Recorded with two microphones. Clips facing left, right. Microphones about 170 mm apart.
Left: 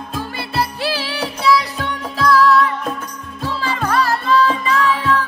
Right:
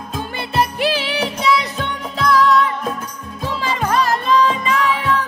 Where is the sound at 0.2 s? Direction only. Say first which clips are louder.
Right 3 dB; 20° right (ahead or behind).